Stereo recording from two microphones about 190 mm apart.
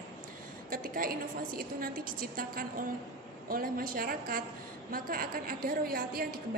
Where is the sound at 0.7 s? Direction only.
50° right (ahead or behind).